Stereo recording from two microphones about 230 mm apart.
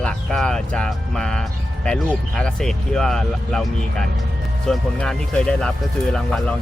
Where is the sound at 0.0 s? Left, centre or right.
Centre.